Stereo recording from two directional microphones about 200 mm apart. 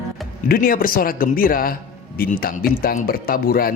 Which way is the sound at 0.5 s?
45° left (ahead or behind).